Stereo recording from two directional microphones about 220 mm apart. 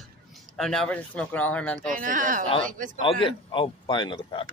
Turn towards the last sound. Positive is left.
turn(degrees=20)  # may be behind; listen again after turning